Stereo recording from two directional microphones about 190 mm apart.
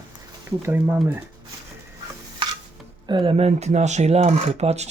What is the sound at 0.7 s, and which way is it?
Speech, 10° right (ahead or behind).